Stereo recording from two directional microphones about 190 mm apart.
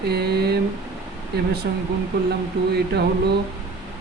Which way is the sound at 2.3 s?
60° right (ahead or behind).